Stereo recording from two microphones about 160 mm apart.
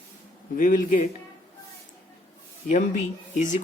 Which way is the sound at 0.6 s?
55° left (ahead or behind).